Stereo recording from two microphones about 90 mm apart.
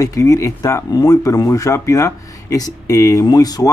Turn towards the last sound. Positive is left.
turn(degrees=45)  # may be behind; listen again after turning